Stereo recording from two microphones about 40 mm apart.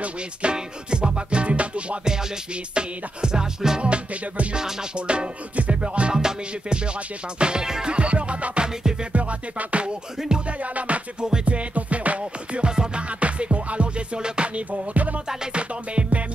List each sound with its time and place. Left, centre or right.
0.0 s music: right
3.8 s music: right
7.3 s music: right
7.9 s music: right
11.1 s music: right
11.4 s music: right
13.2 s music: right
15.2 s music: right